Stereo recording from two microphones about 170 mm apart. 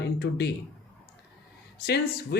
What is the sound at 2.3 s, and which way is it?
Speech, 70° left (ahead or behind).